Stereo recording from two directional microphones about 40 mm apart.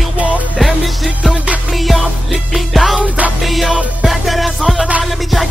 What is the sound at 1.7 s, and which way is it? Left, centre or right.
Music, centre.